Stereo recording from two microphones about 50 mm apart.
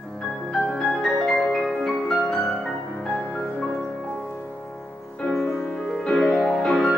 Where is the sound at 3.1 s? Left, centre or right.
Left.